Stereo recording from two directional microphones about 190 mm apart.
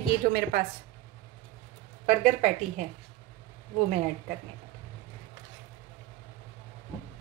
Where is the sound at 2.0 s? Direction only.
35° right (ahead or behind).